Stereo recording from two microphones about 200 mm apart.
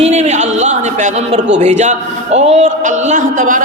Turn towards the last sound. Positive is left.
turn(degrees=-40)  # may be behind; listen again after turning